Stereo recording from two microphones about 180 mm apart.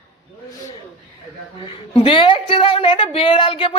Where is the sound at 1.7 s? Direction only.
30° left (ahead or behind).